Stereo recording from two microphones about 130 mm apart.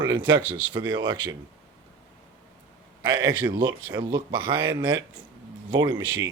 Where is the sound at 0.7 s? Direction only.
35° right (ahead or behind).